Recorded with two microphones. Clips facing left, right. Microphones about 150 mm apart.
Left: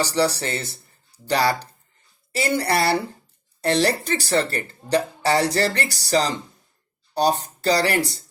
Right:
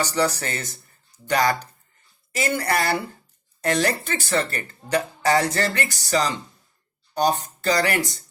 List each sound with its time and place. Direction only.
0.0 s speech: 35° left (ahead or behind)